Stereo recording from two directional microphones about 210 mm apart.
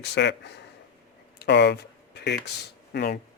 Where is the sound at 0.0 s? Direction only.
55° left (ahead or behind).